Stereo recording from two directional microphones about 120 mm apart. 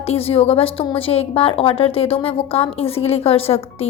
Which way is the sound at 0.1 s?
55° left (ahead or behind).